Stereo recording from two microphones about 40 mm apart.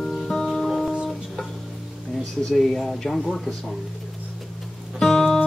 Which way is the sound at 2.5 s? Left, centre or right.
Centre.